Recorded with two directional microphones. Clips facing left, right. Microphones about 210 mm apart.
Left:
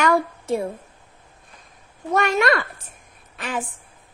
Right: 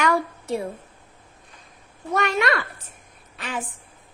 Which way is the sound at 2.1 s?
45° left (ahead or behind).